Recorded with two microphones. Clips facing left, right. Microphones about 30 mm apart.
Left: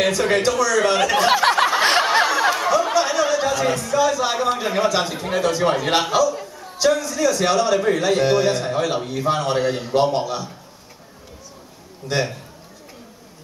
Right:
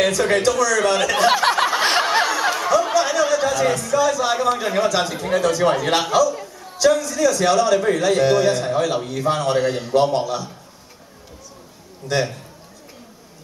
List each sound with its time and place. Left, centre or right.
0.0 s a man's voice: centre
1.1 s a sound: centre
5.6 s a man's voice: centre
12.1 s a man's voice: centre